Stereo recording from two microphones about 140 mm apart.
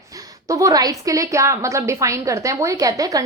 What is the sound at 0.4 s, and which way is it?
A woman's voice, 25° right (ahead or behind).